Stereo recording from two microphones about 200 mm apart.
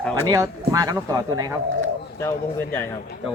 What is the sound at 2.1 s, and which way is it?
Speech, 10° left (ahead or behind).